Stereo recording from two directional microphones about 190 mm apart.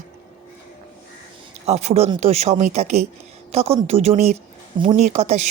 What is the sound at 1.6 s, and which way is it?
A woman's voice, 35° right (ahead or behind).